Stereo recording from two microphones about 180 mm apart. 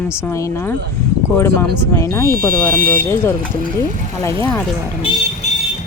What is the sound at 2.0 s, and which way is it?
Speech, 15° left (ahead or behind).